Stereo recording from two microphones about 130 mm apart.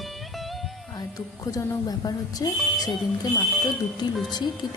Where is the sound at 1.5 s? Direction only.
30° left (ahead or behind).